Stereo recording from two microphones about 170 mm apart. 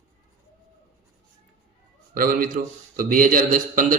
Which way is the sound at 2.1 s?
55° right (ahead or behind).